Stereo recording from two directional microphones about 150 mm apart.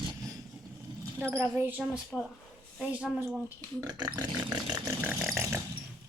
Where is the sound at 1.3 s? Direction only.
15° right (ahead or behind).